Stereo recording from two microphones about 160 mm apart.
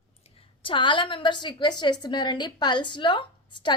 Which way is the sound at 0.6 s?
30° left (ahead or behind).